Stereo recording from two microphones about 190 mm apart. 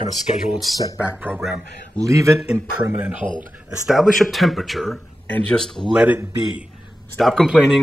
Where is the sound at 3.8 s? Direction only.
Centre (ahead or behind).